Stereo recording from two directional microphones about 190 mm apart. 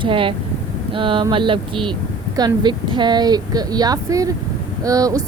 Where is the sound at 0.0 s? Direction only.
25° right (ahead or behind).